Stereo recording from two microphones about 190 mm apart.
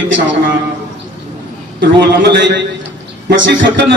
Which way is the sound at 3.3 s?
70° right (ahead or behind).